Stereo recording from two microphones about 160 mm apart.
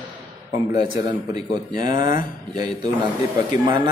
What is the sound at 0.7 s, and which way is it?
Speech, 25° right (ahead or behind).